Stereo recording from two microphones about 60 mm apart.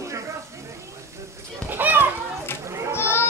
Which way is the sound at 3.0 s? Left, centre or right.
Left.